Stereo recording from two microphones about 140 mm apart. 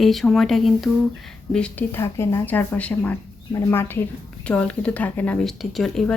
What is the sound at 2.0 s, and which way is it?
A woman's voice, 20° left (ahead or behind).